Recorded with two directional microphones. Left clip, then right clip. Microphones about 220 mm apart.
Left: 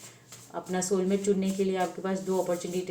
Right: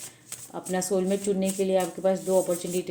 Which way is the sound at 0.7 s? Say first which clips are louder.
Right 2 dB; 50° right (ahead or behind).